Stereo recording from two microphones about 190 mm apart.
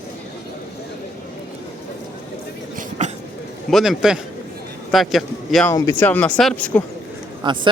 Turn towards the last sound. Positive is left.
turn(degrees=-25)  # may be behind; listen again after turning